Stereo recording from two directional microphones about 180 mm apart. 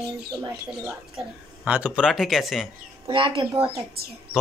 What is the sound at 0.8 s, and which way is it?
Speech, 5° right (ahead or behind).